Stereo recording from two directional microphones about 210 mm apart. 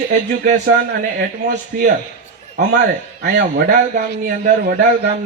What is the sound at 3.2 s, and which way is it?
A man's voice, 45° right (ahead or behind).